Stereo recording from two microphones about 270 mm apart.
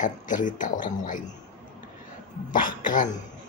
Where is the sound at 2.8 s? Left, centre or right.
Left.